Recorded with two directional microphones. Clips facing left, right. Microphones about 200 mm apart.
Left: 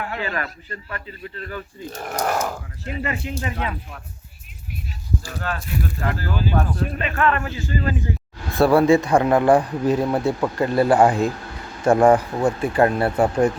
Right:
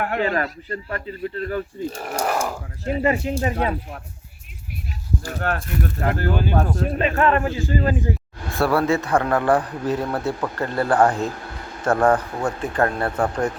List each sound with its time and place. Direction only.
0.2 s speech: 35° right (ahead or behind)
1.9 s speech: 10° right (ahead or behind)
2.8 s speech: 40° right (ahead or behind)
5.2 s speech: 60° right (ahead or behind)
6.6 s speech: 40° right (ahead or behind)
8.5 s a man's voice: 15° left (ahead or behind)